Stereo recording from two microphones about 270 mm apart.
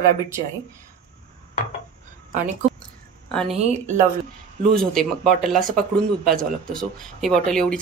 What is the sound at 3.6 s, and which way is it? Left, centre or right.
Speech, right.